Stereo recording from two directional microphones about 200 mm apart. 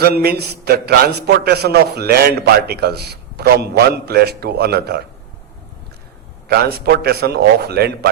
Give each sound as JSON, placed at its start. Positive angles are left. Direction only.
{"t": 0.2, "sound": "a man's voice", "side_deg": -50}
{"t": 6.5, "sound": "a man's voice", "side_deg": -55}